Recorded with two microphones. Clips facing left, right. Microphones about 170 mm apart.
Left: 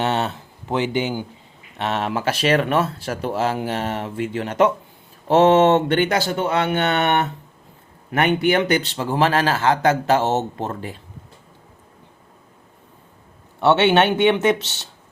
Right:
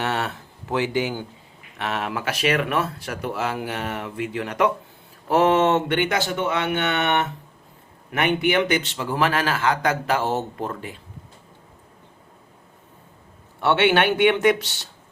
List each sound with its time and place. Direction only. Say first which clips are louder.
0.0 s a man's voice: left 4 dB; 25° left (ahead or behind)
13.6 s speech: left 3 dB; 25° left (ahead or behind)